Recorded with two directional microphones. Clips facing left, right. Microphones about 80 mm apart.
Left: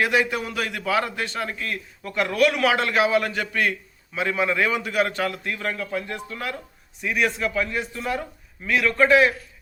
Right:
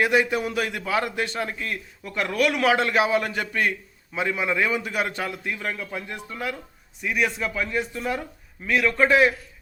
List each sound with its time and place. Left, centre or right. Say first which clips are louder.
0.0 s a man's voice: right 1 dB; right
7.3 s a man's voice: left 1 dB; centre